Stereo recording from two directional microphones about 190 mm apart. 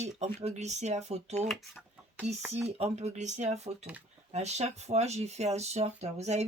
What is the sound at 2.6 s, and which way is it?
Speech, 35° right (ahead or behind).